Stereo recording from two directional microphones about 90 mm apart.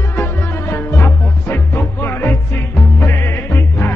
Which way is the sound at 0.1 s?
25° left (ahead or behind).